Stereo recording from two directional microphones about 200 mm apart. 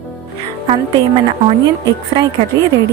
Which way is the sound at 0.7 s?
30° right (ahead or behind).